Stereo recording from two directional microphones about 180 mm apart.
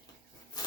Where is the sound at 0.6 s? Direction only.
20° left (ahead or behind).